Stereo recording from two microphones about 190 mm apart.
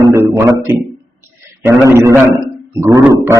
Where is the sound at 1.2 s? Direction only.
15° right (ahead or behind).